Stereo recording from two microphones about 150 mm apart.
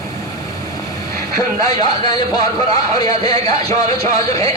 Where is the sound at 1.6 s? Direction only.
25° left (ahead or behind).